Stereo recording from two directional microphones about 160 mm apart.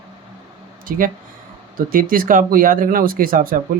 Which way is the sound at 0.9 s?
60° right (ahead or behind).